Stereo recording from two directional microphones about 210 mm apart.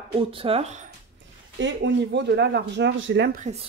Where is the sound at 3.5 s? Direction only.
35° right (ahead or behind).